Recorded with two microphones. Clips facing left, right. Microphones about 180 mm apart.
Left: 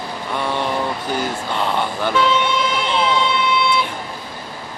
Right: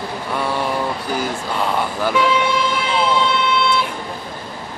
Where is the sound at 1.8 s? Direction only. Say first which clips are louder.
Right 1 dB; 5° right (ahead or behind).